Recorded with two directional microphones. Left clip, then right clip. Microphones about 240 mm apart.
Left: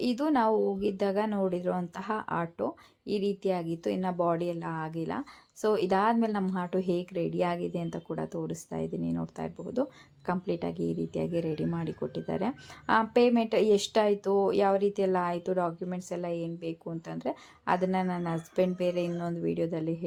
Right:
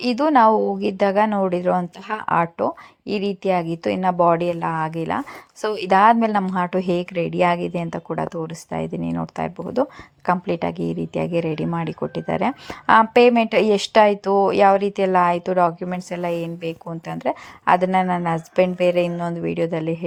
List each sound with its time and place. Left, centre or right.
0.0 s a woman's voice: centre